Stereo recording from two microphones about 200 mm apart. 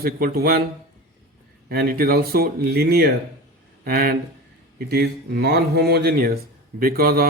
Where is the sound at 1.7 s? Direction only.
50° right (ahead or behind).